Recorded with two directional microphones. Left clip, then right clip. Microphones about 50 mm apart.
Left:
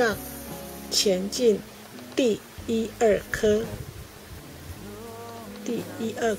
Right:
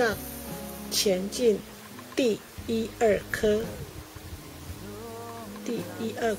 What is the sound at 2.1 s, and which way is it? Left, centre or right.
Music, centre.